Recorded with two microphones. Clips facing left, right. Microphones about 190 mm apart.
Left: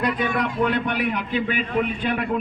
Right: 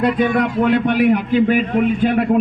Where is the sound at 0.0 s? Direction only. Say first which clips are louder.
Right 7 dB; 55° right (ahead or behind).